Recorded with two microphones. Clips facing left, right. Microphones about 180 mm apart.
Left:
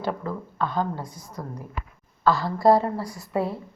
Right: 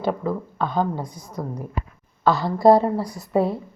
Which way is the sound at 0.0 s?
15° right (ahead or behind).